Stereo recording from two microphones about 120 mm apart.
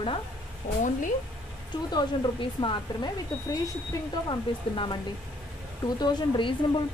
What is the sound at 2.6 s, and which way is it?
Speech, 45° left (ahead or behind).